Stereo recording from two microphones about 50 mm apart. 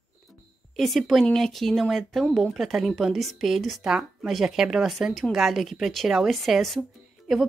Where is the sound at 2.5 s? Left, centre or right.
Centre.